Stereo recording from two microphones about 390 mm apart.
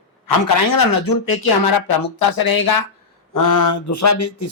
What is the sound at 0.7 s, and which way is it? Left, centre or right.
A man's voice, left.